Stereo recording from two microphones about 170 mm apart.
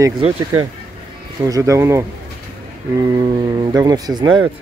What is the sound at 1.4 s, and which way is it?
Speech, 20° right (ahead or behind).